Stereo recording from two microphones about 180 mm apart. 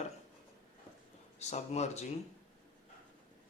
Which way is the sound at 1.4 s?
40° left (ahead or behind).